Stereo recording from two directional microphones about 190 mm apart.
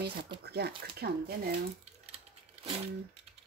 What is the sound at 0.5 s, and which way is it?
A woman's voice, 60° right (ahead or behind).